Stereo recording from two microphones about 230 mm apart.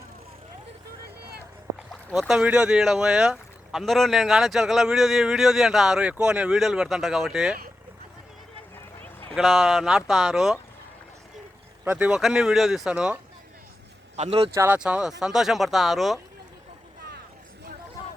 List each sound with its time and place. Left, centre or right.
1.9 s speech: centre
9.3 s speech: centre
11.9 s speech: centre
14.2 s speech: right
14.5 s speech: centre
18.0 s a sound: centre